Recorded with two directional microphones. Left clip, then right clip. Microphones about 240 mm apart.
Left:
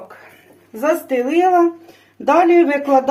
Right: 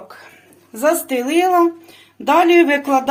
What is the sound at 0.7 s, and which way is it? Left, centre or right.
A woman's voice, right.